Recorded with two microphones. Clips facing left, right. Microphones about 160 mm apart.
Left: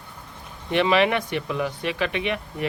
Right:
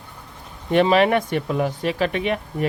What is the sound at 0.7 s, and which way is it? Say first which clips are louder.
Speech: right 4 dB; 45° right (ahead or behind).